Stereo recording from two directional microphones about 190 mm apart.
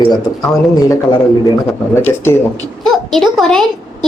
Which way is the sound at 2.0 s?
10° left (ahead or behind).